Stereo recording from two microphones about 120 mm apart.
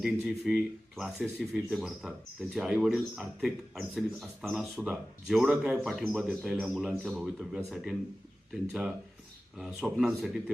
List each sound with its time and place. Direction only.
0.0 s speech: 5° right (ahead or behind)
9.6 s speech: 5° right (ahead or behind)